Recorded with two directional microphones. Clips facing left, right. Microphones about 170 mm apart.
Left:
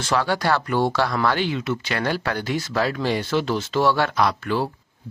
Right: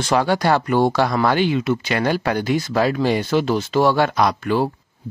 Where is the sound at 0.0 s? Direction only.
15° right (ahead or behind).